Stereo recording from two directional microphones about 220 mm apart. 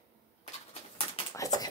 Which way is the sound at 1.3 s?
15° left (ahead or behind).